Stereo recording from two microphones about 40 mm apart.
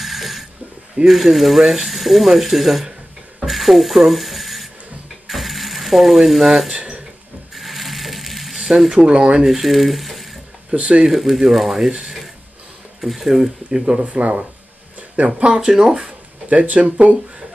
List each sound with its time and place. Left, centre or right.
0.0 s a sound: centre
1.0 s speech: centre
3.3 s rub: centre
5.3 s mechanisms: centre
6.7 s a sound: right
7.5 s ratchet: centre
9.0 s speech: right
9.4 s speech: centre
10.7 s speech: right
11.1 s speech: centre
13.7 s speech: centre
14.0 s speech: right
15.5 s speech: centre
16.4 s speech: right